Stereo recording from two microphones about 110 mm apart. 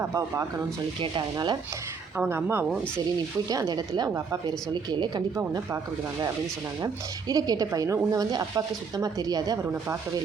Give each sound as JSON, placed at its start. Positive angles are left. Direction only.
{"t": 0.0, "sound": "speech", "side_deg": -30}
{"t": 1.0, "sound": "speech", "side_deg": -45}
{"t": 2.3, "sound": "speech", "side_deg": -20}
{"t": 3.5, "sound": "speech", "side_deg": -35}
{"t": 6.8, "sound": "speech", "side_deg": -35}